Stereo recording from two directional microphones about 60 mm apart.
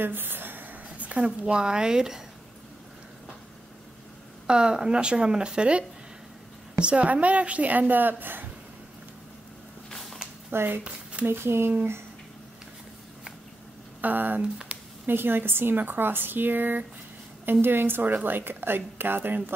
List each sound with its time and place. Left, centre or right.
0.0 s a woman's voice: right; by 2.2 s centre
4.5 s a woman's voice: centre; by 8.5 s right
10.5 s speech: right
14.0 s speech: right
14.4 s speech: centre
15.0 s speech: right